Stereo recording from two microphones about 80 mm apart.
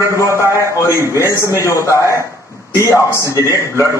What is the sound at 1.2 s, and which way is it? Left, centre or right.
A man's voice, left.